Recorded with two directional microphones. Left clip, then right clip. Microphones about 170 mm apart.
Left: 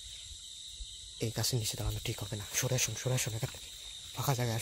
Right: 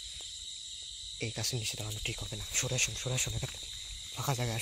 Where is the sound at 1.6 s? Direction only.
25° left (ahead or behind).